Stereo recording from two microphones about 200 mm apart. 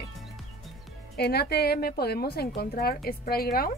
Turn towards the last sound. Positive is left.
turn(degrees=50)  # may be behind; listen again after turning